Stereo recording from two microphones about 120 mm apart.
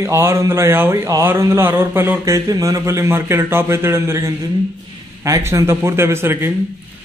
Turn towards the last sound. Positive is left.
turn(degrees=-20)  # may be behind; listen again after turning